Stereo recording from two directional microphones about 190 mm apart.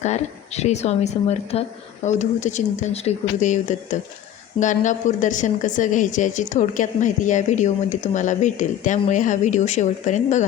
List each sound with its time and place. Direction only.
0.0 s a woman's voice: 35° left (ahead or behind)